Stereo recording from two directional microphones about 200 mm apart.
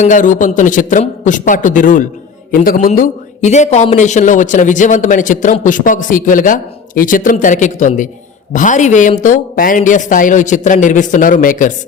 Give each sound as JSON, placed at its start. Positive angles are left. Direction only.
{"t": 0.0, "sound": "a man's voice", "side_deg": 40}